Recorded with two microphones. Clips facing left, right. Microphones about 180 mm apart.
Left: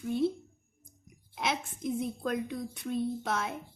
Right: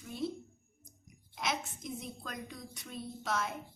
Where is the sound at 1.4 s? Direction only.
55° left (ahead or behind).